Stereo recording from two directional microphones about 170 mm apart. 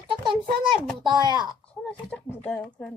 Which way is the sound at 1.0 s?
25° right (ahead or behind).